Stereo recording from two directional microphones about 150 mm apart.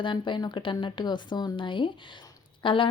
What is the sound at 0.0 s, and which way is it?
Speech, 30° left (ahead or behind).